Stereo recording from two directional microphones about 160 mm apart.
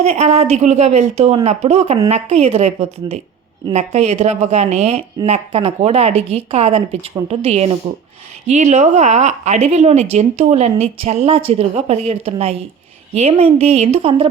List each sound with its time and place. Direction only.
0.0 s a woman's voice: 40° right (ahead or behind)